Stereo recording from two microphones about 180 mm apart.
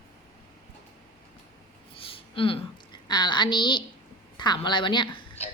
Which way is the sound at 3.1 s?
25° left (ahead or behind).